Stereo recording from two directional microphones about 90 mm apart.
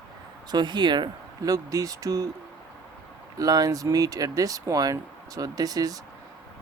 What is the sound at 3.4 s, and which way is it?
Speech, 45° right (ahead or behind).